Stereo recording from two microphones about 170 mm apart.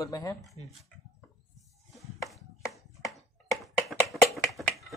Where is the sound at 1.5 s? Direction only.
Centre (ahead or behind).